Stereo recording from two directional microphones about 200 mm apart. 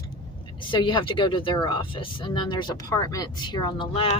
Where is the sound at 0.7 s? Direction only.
25° left (ahead or behind).